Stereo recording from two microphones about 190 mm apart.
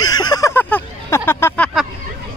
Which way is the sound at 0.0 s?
20° left (ahead or behind).